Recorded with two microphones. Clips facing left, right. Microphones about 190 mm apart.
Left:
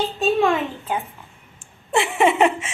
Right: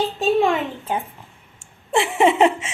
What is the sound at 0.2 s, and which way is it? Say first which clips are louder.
Speech: even; 15° right (ahead or behind).